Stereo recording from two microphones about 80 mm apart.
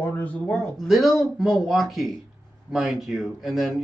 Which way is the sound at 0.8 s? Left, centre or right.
Centre.